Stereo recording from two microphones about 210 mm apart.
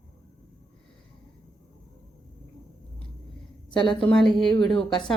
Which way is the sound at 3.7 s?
20° left (ahead or behind).